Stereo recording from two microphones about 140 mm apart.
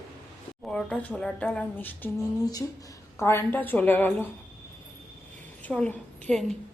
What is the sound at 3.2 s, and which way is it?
Speech, 15° left (ahead or behind).